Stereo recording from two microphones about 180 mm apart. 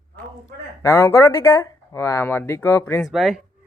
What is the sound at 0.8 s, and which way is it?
Speech, 15° left (ahead or behind).